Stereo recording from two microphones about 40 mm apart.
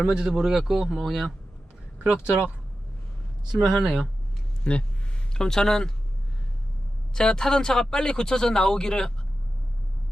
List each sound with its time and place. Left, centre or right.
0.0 s speech: centre
0.3 s speech: centre
2.2 s speech: right
3.5 s speech: centre
4.7 s speech: left
5.3 s speech: centre
7.1 s speech: centre